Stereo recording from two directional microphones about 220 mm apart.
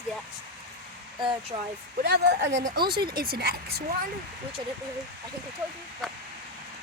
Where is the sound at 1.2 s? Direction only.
20° right (ahead or behind).